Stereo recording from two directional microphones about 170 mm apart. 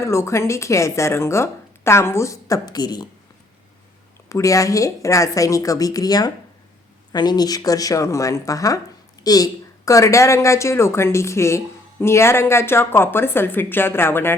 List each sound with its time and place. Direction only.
0.0 s speech: 15° left (ahead or behind)
4.3 s a woman's voice: 20° left (ahead or behind)